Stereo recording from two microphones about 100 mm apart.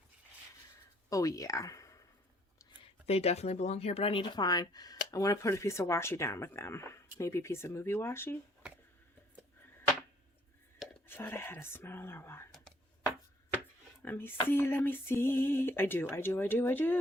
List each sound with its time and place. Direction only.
1.1 s speech: 35° left (ahead or behind)
2.8 s speech: 85° left; by 8.4 s 25° left (ahead or behind)
11.1 s speech: 20° left (ahead or behind)
14.0 s speech: 20° left (ahead or behind)